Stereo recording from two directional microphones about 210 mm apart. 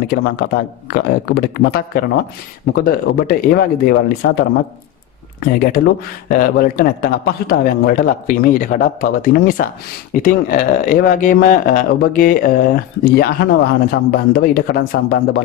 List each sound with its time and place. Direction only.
0.1 s a man's voice: 45° left (ahead or behind)